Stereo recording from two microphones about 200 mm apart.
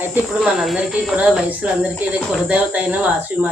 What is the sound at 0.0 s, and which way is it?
Speech, 5° right (ahead or behind).